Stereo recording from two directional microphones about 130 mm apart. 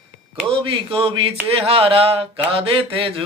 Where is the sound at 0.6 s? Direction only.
45° right (ahead or behind).